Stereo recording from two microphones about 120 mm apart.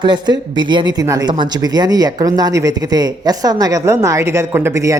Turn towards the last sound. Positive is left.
turn(degrees=-25)  # may be behind; listen again after turning